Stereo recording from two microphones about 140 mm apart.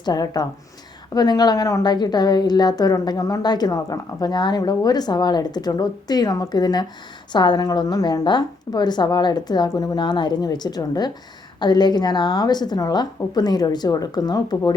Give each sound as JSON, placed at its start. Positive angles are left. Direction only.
{"t": 0.0, "sound": "a woman's voice", "side_deg": 30}